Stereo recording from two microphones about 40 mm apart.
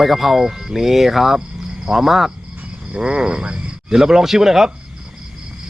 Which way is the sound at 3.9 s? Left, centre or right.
Centre.